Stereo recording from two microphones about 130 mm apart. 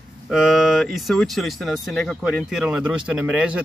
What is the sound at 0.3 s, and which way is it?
Speech, centre (ahead or behind).